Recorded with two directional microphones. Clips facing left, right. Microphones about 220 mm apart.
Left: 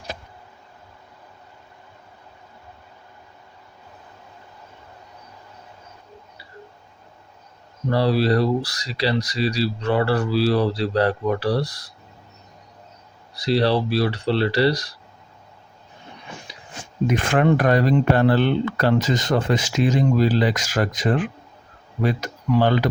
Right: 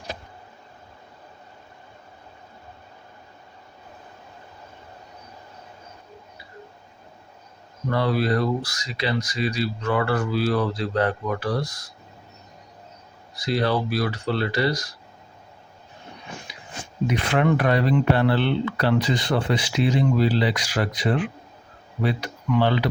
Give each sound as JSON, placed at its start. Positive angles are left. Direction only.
{"t": 7.9, "sound": "speech", "side_deg": 30}
{"t": 13.3, "sound": "speech", "side_deg": 35}
{"t": 17.1, "sound": "speech", "side_deg": 45}